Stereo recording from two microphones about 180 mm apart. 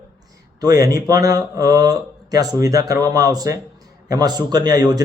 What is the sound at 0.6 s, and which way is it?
Speech, 20° right (ahead or behind).